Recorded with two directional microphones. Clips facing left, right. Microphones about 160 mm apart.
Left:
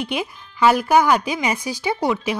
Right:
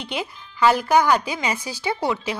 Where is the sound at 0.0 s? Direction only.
15° left (ahead or behind).